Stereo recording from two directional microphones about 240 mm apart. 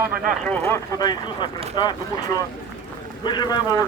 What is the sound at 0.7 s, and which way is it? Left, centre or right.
Speech, centre.